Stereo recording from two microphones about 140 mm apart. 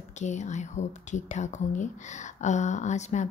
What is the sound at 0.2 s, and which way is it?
A woman's voice, 55° left (ahead or behind).